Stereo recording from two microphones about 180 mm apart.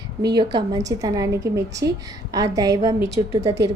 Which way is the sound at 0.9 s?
20° right (ahead or behind).